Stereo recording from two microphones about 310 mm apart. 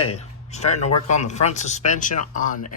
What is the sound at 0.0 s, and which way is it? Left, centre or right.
Speech, centre.